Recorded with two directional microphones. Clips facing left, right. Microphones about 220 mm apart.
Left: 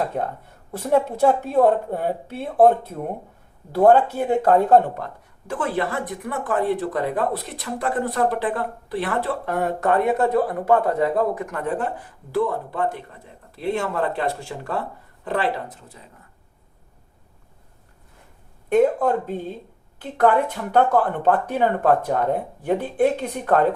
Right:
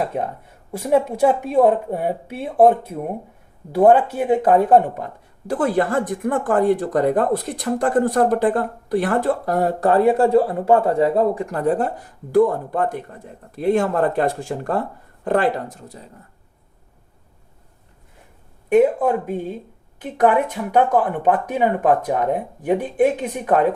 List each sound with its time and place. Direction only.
0.0 s speech: 10° right (ahead or behind)
5.5 s speech: 40° right (ahead or behind)
18.7 s speech: 10° right (ahead or behind)